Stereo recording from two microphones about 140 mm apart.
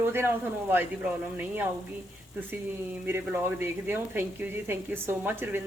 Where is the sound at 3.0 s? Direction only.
15° right (ahead or behind).